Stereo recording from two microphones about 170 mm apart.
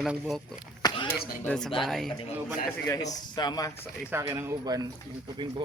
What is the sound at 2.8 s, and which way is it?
Speech, 20° left (ahead or behind).